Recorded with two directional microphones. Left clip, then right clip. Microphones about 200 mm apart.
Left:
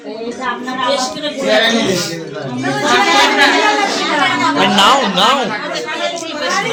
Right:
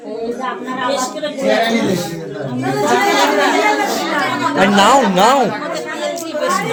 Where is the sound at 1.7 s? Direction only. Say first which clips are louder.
Left 2 dB; 25° right (ahead or behind).